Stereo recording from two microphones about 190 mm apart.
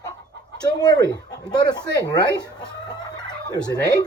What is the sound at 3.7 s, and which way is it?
Speech, 20° left (ahead or behind).